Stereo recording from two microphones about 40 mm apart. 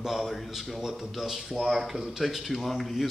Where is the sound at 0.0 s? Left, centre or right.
Centre.